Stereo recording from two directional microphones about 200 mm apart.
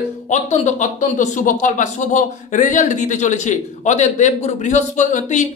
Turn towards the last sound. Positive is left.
turn(degrees=35)  # may be behind; listen again after turning